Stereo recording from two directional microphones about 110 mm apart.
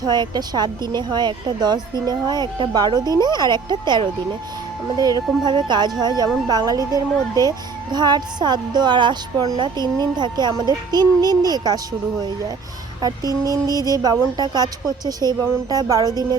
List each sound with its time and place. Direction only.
0.0 s speech: 40° right (ahead or behind)
13.0 s speech: 35° right (ahead or behind)